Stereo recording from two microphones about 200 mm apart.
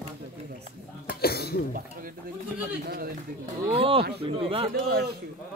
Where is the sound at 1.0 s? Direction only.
50° left (ahead or behind).